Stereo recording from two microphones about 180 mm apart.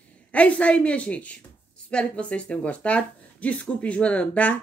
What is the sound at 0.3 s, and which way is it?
Speech, 5° left (ahead or behind).